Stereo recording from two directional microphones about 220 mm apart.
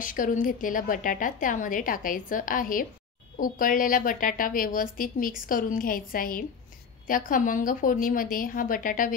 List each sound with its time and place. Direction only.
0.0 s a woman's voice: 35° left (ahead or behind)